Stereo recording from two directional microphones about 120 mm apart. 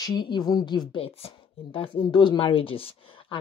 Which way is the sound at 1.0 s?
50° left (ahead or behind).